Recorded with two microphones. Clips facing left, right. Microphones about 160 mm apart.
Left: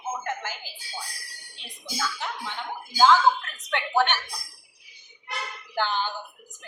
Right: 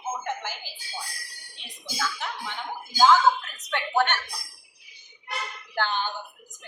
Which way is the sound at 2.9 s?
5° right (ahead or behind).